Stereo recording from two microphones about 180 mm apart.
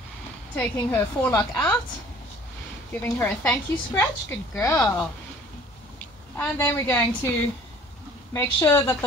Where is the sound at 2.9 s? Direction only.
10° left (ahead or behind).